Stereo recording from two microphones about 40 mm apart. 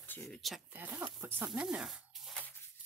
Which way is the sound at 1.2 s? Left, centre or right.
Right.